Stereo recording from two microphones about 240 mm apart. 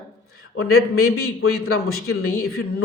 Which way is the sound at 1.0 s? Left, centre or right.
Left.